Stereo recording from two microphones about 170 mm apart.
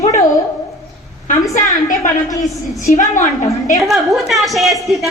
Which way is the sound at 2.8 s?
50° left (ahead or behind).